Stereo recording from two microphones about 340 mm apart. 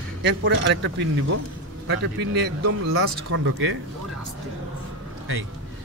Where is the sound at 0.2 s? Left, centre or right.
Right.